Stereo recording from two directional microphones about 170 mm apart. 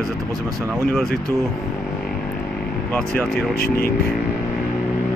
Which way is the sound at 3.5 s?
60° left (ahead or behind).